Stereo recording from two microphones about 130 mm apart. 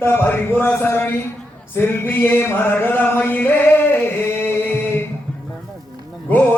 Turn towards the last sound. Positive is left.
turn(degrees=15)  # may be behind; listen again after turning